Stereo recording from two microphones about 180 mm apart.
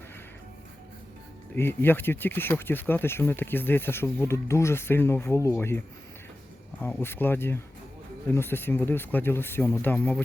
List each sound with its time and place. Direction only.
1.5 s speech: 10° left (ahead or behind)